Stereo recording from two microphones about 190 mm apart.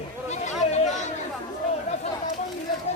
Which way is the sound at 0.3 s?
35° left (ahead or behind).